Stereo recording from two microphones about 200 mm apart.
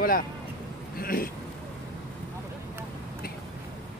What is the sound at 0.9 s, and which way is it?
Speech, 45° left (ahead or behind).